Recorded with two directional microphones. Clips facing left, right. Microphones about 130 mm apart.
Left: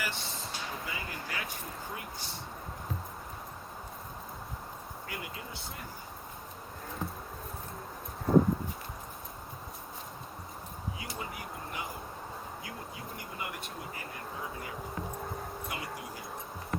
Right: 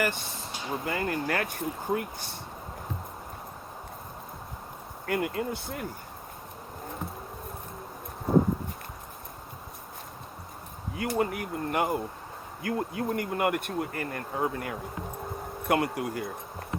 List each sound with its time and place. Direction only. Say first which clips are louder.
0.0 s speech: right 9 dB; 50° right (ahead or behind)
0.9 s bee: right 11 dB; 55° right (ahead or behind)
5.0 s bee: right 15 dB; 60° right (ahead or behind)
10.9 s bee: right 17 dB; 60° right (ahead or behind)